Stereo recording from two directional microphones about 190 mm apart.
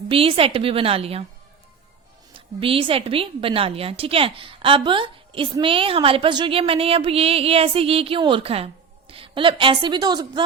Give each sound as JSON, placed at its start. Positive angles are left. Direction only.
{"t": 0.1, "sound": "a woman's voice", "side_deg": -30}
{"t": 2.6, "sound": "a woman's voice", "side_deg": -30}